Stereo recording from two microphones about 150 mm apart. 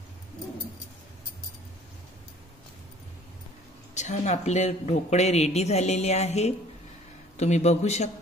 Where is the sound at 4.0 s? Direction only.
50° left (ahead or behind).